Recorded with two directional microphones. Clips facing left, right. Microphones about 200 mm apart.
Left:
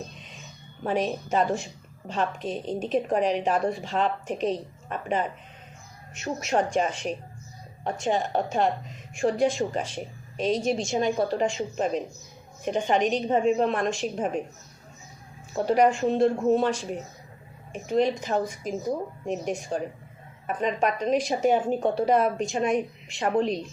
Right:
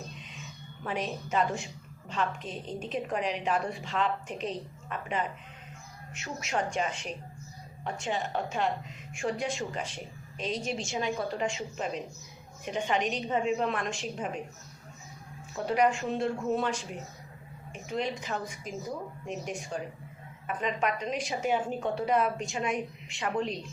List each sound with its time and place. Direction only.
0.9 s a woman's voice: 40° left (ahead or behind)
15.5 s a woman's voice: 40° left (ahead or behind)
17.9 s a woman's voice: 40° left (ahead or behind)